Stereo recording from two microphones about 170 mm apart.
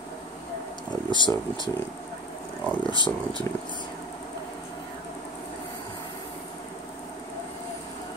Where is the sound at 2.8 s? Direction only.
30° left (ahead or behind).